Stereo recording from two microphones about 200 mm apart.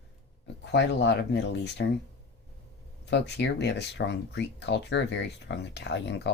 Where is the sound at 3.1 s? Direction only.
60° left (ahead or behind).